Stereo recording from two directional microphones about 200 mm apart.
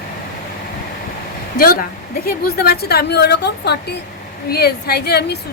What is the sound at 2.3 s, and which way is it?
A woman's voice, 50° left (ahead or behind).